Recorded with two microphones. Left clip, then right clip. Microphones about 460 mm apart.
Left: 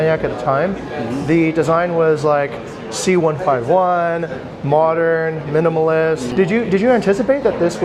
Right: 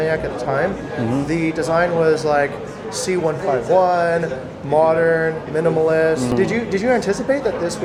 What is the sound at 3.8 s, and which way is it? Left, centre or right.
Speech, left.